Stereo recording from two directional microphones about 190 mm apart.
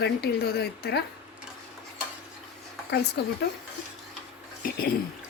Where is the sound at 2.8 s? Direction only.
60° left (ahead or behind).